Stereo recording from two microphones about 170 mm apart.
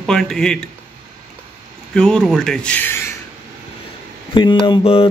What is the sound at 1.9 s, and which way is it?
Speech, 5° left (ahead or behind).